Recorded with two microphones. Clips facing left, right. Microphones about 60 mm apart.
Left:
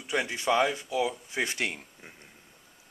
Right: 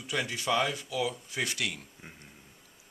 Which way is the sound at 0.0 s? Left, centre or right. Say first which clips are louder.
Left 3 dB; left.